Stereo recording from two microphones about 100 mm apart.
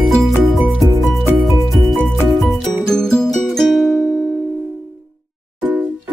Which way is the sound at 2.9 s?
5° left (ahead or behind).